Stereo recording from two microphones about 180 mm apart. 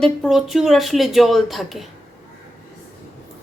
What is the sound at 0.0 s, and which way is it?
A woman's voice, centre (ahead or behind).